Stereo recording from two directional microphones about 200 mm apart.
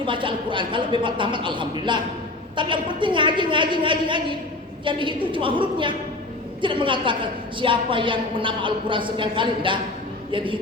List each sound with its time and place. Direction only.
0.0 s a woman's voice: 25° right (ahead or behind)